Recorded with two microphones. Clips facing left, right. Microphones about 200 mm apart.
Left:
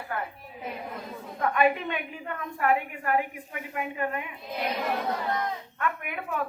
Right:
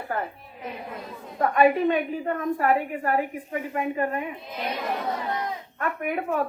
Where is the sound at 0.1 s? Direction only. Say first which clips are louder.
Right 4 dB; 40° right (ahead or behind).